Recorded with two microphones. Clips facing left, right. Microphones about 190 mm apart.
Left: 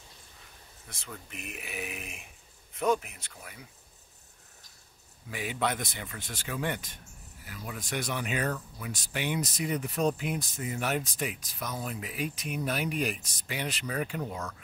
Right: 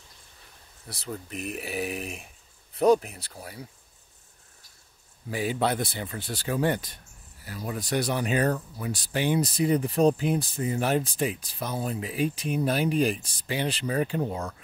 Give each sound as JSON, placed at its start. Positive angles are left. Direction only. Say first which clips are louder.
{"t": 0.8, "sound": "speech", "louder": "right 9 dB", "side_deg": -35}
{"t": 5.3, "sound": "speech", "louder": "right 5 dB", "side_deg": -35}